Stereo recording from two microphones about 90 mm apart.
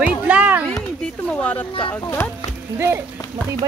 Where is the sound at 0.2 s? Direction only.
15° right (ahead or behind).